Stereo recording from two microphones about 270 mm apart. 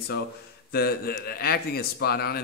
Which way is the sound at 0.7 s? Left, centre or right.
Left.